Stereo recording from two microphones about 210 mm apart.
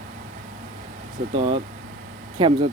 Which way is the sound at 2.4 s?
20° right (ahead or behind).